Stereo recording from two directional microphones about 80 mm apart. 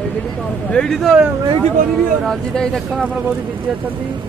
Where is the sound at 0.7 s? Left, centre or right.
Centre.